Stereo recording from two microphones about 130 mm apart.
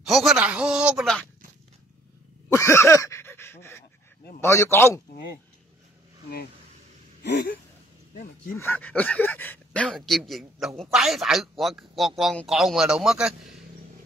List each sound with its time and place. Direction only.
0.0 s speech: centre (ahead or behind)
2.5 s a sound: 20° left (ahead or behind)
4.4 s speech: 20° left (ahead or behind)
8.6 s speech: 15° left (ahead or behind); by 13.6 s 5° right (ahead or behind)